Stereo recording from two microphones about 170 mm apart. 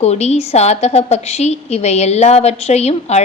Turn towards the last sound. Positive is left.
turn(degrees=40)  # may be behind; listen again after turning